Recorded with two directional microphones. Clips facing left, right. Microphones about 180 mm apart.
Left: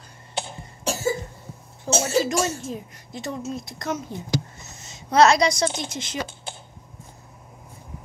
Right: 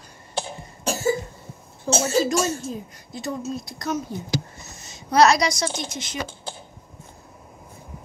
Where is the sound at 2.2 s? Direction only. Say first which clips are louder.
Right 1 dB; 25° left (ahead or behind).